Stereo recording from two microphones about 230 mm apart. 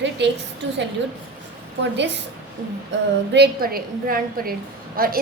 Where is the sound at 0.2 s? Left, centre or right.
Right.